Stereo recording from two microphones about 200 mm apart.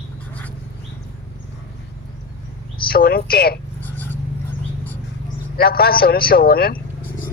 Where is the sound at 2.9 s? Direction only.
50° left (ahead or behind).